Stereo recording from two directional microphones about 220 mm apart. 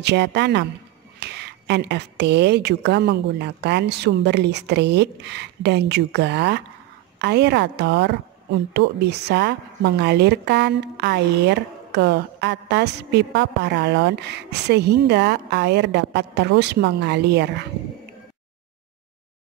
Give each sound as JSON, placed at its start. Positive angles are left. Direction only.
{"t": 0.0, "sound": "a woman's voice", "side_deg": -50}